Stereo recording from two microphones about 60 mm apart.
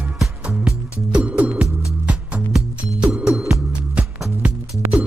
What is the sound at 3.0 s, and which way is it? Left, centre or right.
Music, centre.